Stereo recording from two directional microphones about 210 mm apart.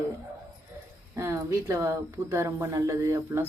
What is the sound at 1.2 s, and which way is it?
Speech, 15° right (ahead or behind).